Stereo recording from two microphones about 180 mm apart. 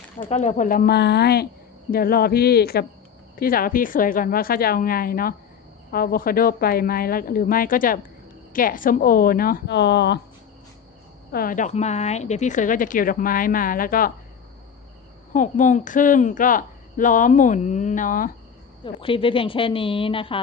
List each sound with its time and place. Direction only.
0.3 s a woman's voice: 45° left (ahead or behind); by 10.2 s 70° left (ahead or behind)
11.3 s a woman's voice: 55° left (ahead or behind)
15.3 s a woman's voice: 45° left (ahead or behind)
18.9 s a woman's voice: 30° left (ahead or behind)